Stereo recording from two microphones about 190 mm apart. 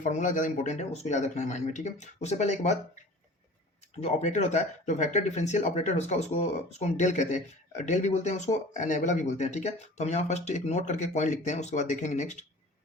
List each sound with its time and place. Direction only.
0.0 s speech: 40° left (ahead or behind)